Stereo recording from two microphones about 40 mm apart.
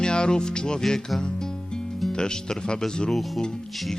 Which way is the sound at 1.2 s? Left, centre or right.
Left.